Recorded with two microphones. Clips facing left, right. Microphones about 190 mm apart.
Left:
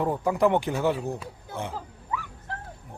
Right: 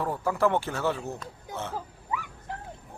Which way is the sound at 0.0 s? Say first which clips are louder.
Left 3 dB; 20° left (ahead or behind).